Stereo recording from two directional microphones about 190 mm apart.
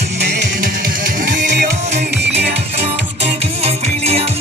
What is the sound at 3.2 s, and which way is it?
Music, 30° right (ahead or behind).